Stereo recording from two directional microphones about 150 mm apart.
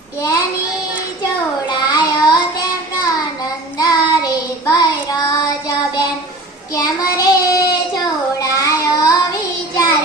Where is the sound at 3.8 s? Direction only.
25° left (ahead or behind).